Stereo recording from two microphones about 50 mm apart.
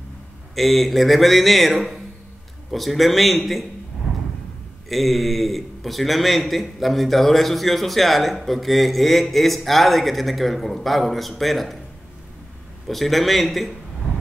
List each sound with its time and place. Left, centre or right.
0.6 s a man's voice: centre
4.8 s a man's voice: centre
12.8 s a man's voice: centre